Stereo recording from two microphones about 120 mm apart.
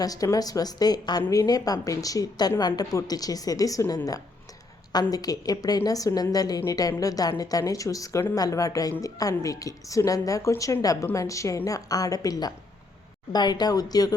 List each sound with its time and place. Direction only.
0.0 s a woman's voice: 30° left (ahead or behind)